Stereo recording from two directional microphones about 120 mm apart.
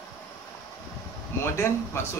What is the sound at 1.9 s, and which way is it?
Speech, 20° left (ahead or behind).